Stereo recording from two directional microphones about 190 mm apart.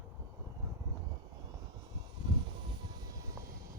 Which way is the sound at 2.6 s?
25° right (ahead or behind).